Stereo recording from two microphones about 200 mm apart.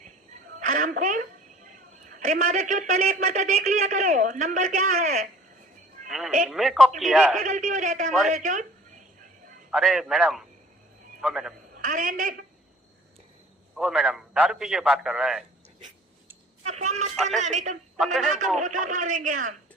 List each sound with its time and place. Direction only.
0.6 s a woman's voice: 40° right (ahead or behind)
6.1 s a man's voice: centre (ahead or behind)
7.3 s speech: 40° right (ahead or behind)
8.3 s a sound: 40° right (ahead or behind)
9.7 s a man's voice: centre (ahead or behind)
11.7 s a woman's voice: 40° right (ahead or behind)
13.7 s a man's voice: centre (ahead or behind)
16.6 s a sound: 35° right (ahead or behind)
17.2 s speech: 35° right (ahead or behind)
18.0 s a man's voice: centre (ahead or behind)
18.6 s speech: 40° right (ahead or behind)